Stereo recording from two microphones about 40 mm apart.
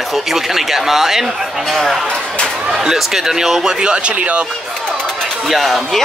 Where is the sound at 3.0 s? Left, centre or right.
Centre.